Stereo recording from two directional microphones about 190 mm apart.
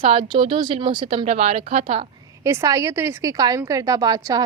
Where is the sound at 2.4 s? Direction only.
15° right (ahead or behind).